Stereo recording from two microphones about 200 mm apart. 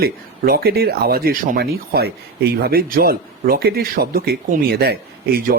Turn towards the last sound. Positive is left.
turn(degrees=-45)  # may be behind; listen again after turning